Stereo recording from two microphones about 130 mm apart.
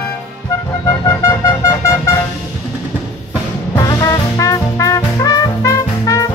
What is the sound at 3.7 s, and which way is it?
Music, 30° left (ahead or behind).